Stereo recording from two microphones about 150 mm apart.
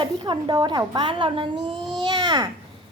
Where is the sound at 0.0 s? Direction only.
30° right (ahead or behind).